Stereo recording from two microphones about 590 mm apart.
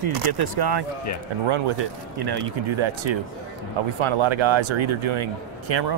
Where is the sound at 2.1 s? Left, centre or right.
Right.